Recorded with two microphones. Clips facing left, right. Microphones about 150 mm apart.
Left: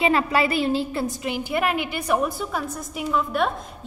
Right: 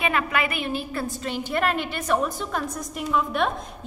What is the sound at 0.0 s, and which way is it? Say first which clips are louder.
A woman's voice: left 4 dB; 30° left (ahead or behind).